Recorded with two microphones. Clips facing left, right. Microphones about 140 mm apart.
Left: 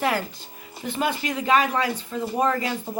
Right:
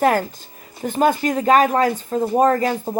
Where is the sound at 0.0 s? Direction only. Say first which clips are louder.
Right 7 dB; 45° right (ahead or behind).